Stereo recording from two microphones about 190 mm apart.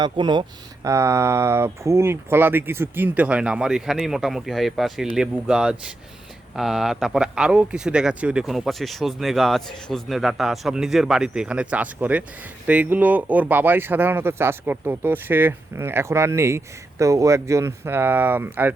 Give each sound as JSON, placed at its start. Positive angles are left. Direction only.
{"t": 0.0, "sound": "speech", "side_deg": -25}